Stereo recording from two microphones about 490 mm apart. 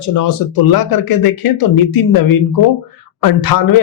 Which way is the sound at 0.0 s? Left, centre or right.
Left.